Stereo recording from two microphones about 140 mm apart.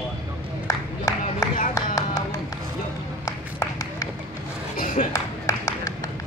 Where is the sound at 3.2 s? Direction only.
25° left (ahead or behind).